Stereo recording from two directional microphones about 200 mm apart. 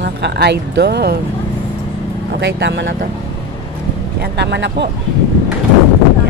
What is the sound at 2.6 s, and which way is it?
Speech, 65° right (ahead or behind).